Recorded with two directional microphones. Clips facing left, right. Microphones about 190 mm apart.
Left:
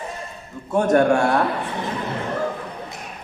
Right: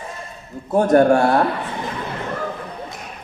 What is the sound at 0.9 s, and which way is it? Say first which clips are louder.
Speech: right 3 dB; 35° right (ahead or behind).